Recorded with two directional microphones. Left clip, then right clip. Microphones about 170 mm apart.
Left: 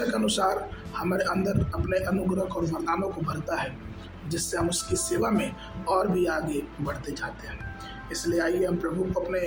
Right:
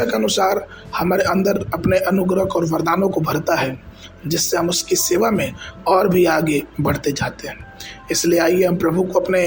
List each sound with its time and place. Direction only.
0.1 s a man's voice: 35° right (ahead or behind)